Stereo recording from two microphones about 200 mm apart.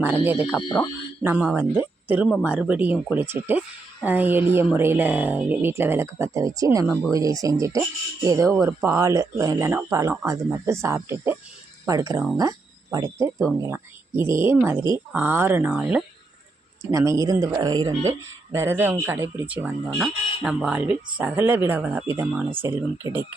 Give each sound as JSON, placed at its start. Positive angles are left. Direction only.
{"t": 0.0, "sound": "speech", "side_deg": -10}